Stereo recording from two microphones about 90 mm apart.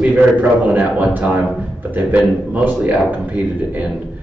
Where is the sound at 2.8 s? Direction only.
15° right (ahead or behind).